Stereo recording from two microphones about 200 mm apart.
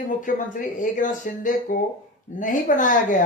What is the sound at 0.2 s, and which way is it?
Speech, 40° left (ahead or behind).